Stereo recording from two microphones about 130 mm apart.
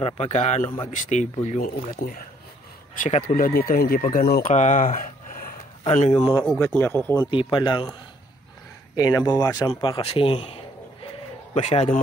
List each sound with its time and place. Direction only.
0.0 s a man's voice: 55° left (ahead or behind); by 2.2 s 90° left
3.0 s speech: 75° left (ahead or behind); by 4.2 s 90° left
4.4 s speech: 70° left (ahead or behind); by 6.3 s 50° left (ahead or behind)
6.6 s speech: 20° left (ahead or behind)
7.2 s speech: 40° left (ahead or behind)
8.9 s a man's voice: 30° left (ahead or behind); by 11.1 s 45° left (ahead or behind)
11.5 s a man's voice: 55° left (ahead or behind)